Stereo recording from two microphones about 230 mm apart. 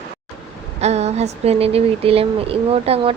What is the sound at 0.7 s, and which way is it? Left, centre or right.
Speech, right.